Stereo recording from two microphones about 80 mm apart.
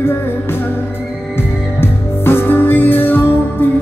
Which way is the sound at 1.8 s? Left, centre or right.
Left.